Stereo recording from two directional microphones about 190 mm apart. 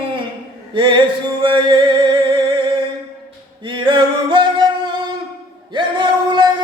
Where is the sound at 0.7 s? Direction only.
25° right (ahead or behind).